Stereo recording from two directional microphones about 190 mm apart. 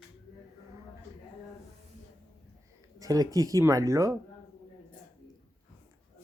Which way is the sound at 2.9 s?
20° right (ahead or behind).